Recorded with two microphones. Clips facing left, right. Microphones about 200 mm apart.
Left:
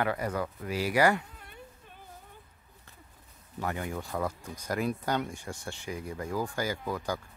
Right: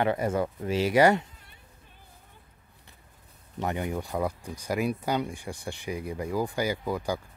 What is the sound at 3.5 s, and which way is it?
Speech, 20° right (ahead or behind).